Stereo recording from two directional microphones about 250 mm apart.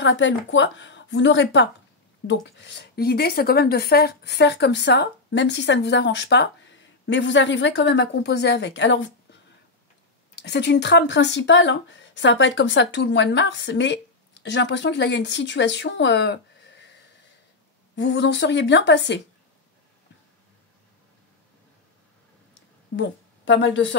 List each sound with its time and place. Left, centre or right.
0.0 s a woman's voice: left
10.4 s a woman's voice: left
17.9 s a woman's voice: left
22.9 s a woman's voice: left